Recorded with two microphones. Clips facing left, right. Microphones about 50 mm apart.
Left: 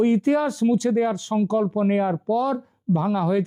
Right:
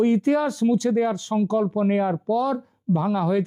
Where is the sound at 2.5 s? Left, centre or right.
Centre.